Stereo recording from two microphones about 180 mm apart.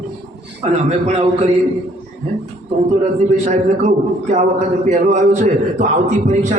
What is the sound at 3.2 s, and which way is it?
A man's voice, 40° right (ahead or behind).